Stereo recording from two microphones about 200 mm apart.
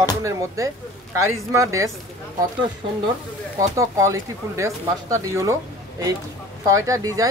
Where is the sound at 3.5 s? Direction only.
15° right (ahead or behind).